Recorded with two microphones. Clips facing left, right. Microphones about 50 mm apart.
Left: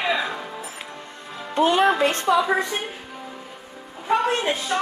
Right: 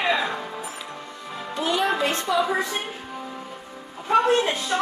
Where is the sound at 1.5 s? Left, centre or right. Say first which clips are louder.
Left 5 dB; left.